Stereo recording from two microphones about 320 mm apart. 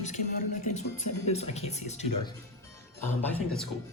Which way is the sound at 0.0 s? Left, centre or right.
Left.